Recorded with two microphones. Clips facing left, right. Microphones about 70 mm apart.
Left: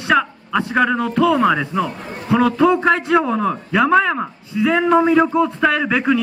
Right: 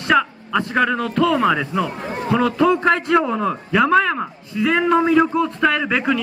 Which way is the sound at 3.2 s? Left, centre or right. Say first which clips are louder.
Left 2 dB; centre.